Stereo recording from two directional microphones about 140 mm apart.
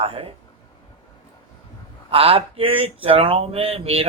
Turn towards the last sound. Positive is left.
turn(degrees=-45)  # may be behind; listen again after turning